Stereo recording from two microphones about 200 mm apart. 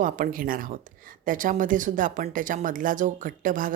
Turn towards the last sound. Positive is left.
turn(degrees=-40)  # may be behind; listen again after turning